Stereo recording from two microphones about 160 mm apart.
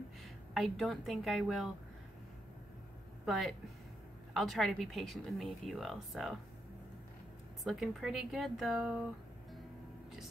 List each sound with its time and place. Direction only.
0.2 s a woman's voice: centre (ahead or behind)
3.3 s a woman's voice: centre (ahead or behind)
7.6 s a woman's voice: centre (ahead or behind)